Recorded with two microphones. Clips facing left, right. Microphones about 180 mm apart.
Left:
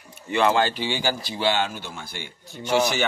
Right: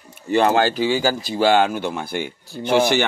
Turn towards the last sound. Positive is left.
turn(degrees=-55)  # may be behind; listen again after turning